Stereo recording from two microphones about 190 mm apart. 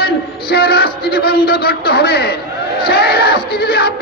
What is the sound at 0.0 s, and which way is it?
A man's voice, 55° left (ahead or behind).